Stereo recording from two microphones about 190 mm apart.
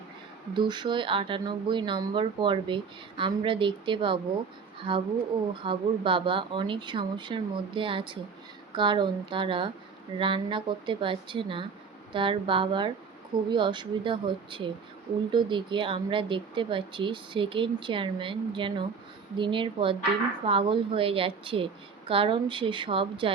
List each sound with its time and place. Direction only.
0.5 s speech: 25° right (ahead or behind)